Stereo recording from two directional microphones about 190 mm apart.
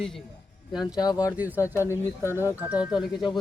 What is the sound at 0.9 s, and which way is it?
Speech, 20° left (ahead or behind).